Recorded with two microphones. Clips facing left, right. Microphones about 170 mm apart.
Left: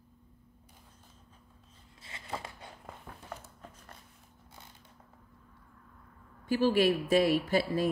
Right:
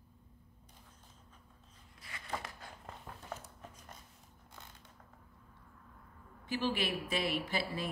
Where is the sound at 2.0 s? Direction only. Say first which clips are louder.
Left 2 dB; 25° left (ahead or behind).